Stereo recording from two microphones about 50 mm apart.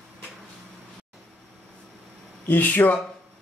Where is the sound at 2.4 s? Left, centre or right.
Left.